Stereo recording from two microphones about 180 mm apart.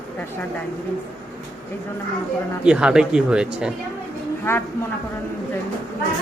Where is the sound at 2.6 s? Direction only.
5° right (ahead or behind).